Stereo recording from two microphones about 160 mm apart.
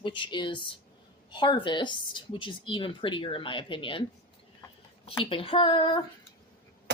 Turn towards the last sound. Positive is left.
turn(degrees=30)  # may be behind; listen again after turning